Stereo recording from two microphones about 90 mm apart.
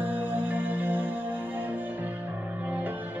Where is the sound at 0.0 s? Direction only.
20° right (ahead or behind).